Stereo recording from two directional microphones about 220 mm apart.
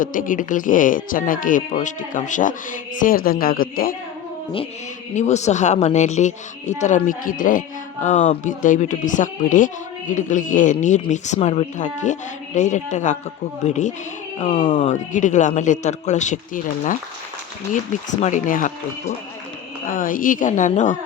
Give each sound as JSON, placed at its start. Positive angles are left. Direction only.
{"t": 0.0, "sound": "speech", "side_deg": 35}
{"t": 5.1, "sound": "speech", "side_deg": 30}
{"t": 18.1, "sound": "speech", "side_deg": 35}
{"t": 19.9, "sound": "speech", "side_deg": 40}